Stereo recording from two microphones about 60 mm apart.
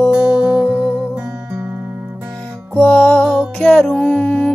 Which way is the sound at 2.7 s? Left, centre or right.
Left.